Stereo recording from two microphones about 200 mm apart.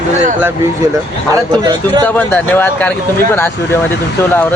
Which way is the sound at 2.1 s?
10° left (ahead or behind).